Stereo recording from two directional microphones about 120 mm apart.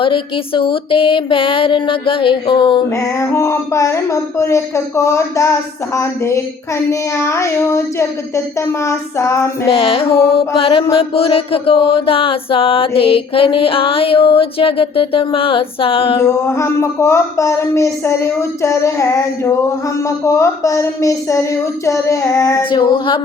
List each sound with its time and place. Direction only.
0.0 s chant: 45° left (ahead or behind)
2.9 s speech: 25° left (ahead or behind)
9.6 s chant: 45° left (ahead or behind)
16.1 s speech: 25° left (ahead or behind)
22.7 s a sound: 40° left (ahead or behind)